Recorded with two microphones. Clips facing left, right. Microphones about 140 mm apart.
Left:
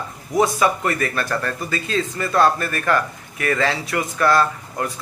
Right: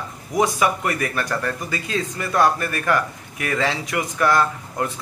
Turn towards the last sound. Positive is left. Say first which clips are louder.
# left 1 dB
turn(degrees=-15)  # may be behind; listen again after turning